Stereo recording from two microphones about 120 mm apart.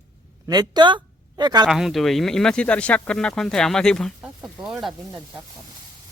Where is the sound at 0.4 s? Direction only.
35° right (ahead or behind).